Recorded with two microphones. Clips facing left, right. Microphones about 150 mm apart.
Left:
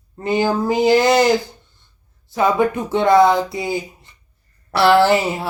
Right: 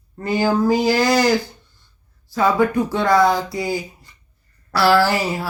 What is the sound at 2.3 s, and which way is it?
Music, 20° left (ahead or behind).